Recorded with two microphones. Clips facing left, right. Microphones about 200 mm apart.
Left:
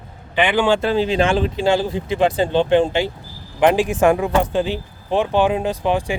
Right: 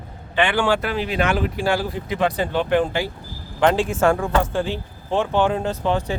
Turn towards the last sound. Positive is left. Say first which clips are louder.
# left 2 dB
turn(degrees=15)  # may be behind; listen again after turning